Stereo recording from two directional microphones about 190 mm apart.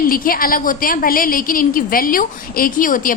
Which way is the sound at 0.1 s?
50° left (ahead or behind).